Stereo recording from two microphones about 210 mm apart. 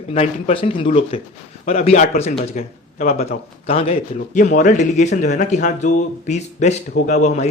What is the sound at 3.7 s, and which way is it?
Speech, 30° left (ahead or behind).